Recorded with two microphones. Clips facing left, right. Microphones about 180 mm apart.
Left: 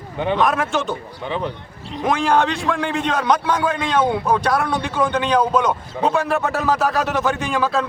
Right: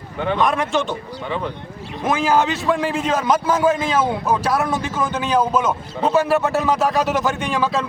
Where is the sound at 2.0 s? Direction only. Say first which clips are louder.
Even; 5° right (ahead or behind).